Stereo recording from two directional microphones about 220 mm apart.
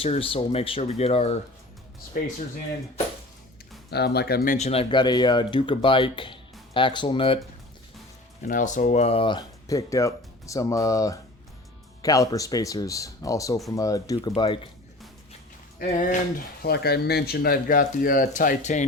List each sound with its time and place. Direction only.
0.0 s speech: 25° left (ahead or behind)
2.1 s speech: 45° left (ahead or behind)
3.8 s speech: 45° left (ahead or behind)
4.5 s speech: 30° left (ahead or behind)
8.4 s speech: 35° left (ahead or behind); by 14.7 s 20° left (ahead or behind)
15.8 s speech: 35° left (ahead or behind)